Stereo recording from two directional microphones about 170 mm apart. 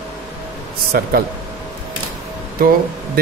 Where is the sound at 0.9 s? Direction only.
65° right (ahead or behind).